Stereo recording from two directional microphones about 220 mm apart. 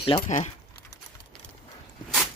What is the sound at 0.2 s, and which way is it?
Speech, 35° left (ahead or behind).